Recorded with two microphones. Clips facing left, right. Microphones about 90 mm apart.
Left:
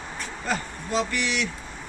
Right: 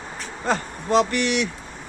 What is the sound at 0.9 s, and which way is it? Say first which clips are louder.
Speech: right 7 dB; 60° right (ahead or behind).